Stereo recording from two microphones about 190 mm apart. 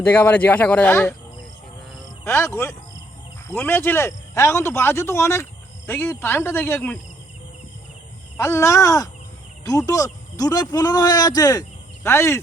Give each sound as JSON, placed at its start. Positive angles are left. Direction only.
{"t": 0.0, "sound": "speech", "side_deg": 10}
{"t": 2.2, "sound": "speech", "side_deg": 15}
{"t": 8.4, "sound": "speech", "side_deg": 15}